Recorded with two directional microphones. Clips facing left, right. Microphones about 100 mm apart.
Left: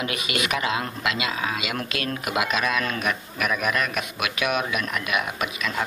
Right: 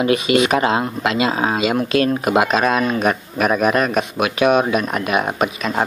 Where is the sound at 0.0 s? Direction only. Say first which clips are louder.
Right 12 dB; 30° right (ahead or behind).